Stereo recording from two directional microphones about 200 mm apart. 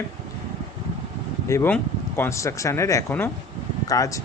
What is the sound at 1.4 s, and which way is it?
Speech, 10° left (ahead or behind).